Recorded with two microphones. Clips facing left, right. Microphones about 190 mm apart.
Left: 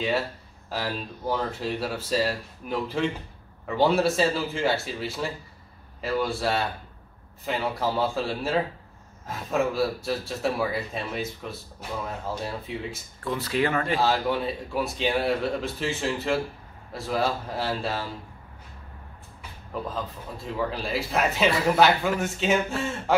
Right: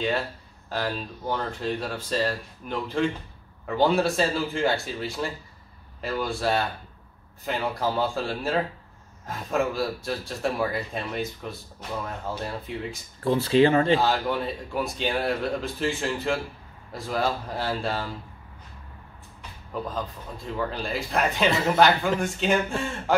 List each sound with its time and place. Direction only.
0.7 s speech: 5° left (ahead or behind)
13.2 s speech: 30° right (ahead or behind)
13.9 s speech: centre (ahead or behind)
19.7 s speech: centre (ahead or behind)